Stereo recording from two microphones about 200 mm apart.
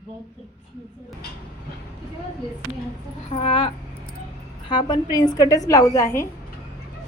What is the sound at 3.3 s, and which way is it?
A woman's voice, 30° left (ahead or behind).